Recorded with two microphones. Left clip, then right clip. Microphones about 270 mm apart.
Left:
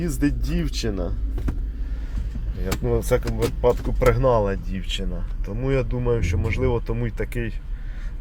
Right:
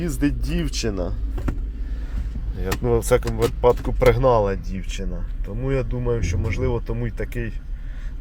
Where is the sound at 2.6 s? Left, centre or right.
Right.